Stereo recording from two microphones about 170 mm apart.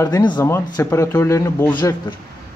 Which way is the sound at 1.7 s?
25° left (ahead or behind).